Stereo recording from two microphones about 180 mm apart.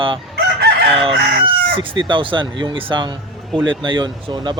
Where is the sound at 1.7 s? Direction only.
30° right (ahead or behind).